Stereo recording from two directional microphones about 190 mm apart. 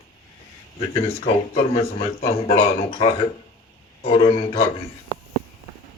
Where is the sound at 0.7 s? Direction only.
35° left (ahead or behind).